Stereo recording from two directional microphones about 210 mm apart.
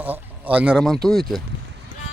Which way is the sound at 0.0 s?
5° right (ahead or behind).